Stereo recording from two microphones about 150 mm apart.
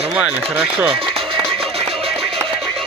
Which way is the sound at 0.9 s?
35° right (ahead or behind).